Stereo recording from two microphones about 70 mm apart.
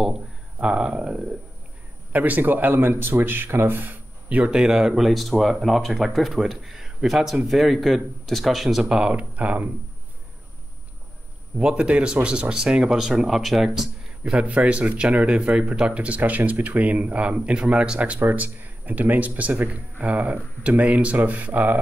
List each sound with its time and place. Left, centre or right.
0.0 s speech: centre
2.1 s speech: right
4.6 s speech: centre
11.5 s speech: centre
14.4 s speech: centre